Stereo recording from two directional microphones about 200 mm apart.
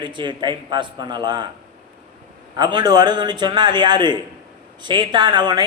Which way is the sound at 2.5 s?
20° right (ahead or behind).